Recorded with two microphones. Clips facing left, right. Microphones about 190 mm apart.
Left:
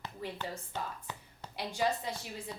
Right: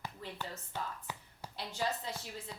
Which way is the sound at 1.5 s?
15° left (ahead or behind).